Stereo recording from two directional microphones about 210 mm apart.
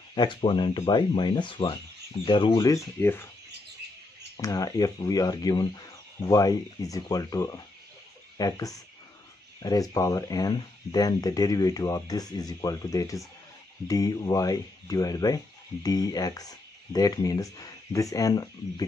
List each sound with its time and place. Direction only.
0.1 s speech: 20° left (ahead or behind)
4.4 s speech: 15° left (ahead or behind)